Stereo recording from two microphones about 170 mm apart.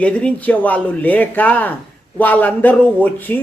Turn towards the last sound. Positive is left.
turn(degrees=10)  # may be behind; listen again after turning